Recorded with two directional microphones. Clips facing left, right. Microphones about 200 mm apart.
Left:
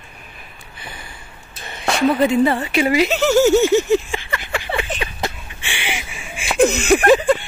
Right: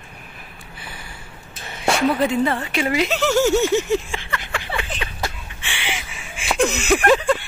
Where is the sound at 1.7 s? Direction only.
5° right (ahead or behind).